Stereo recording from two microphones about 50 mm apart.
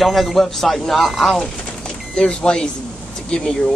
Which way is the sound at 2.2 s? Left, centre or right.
Centre.